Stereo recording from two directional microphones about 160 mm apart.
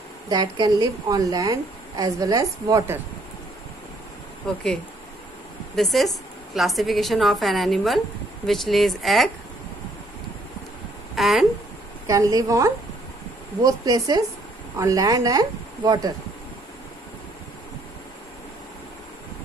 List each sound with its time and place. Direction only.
0.3 s a woman's voice: 25° right (ahead or behind)
4.4 s a woman's voice: 5° left (ahead or behind)
5.8 s a woman's voice: centre (ahead or behind)
11.1 s a woman's voice: centre (ahead or behind)
12.1 s a woman's voice: 20° right (ahead or behind)